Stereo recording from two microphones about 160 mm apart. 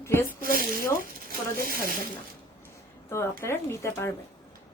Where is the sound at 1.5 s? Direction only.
65° right (ahead or behind).